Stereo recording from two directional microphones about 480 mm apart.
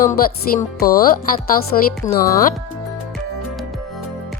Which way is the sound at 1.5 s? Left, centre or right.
Centre.